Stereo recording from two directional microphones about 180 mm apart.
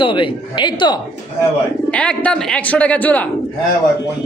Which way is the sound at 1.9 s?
5° left (ahead or behind).